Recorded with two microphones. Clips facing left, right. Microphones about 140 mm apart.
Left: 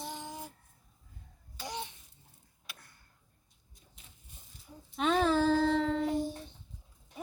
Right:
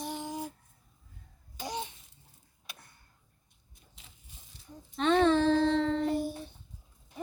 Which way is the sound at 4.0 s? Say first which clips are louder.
Right 2 dB; 90° right.